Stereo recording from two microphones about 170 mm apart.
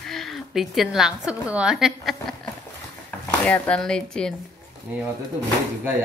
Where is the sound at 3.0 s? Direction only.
10° left (ahead or behind).